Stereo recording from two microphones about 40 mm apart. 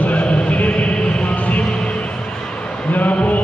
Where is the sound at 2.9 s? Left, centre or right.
Left.